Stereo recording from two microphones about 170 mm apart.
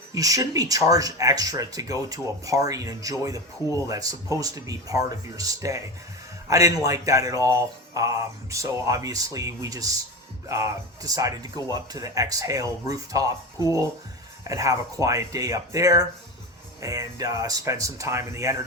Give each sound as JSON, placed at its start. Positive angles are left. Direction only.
{"t": 0.1, "sound": "speech", "side_deg": -20}
{"t": 14.4, "sound": "speech", "side_deg": -20}